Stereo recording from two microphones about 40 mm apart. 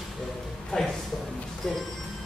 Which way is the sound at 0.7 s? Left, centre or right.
Left.